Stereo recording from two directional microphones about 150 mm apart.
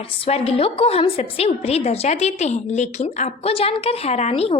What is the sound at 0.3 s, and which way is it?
Speech, 40° left (ahead or behind).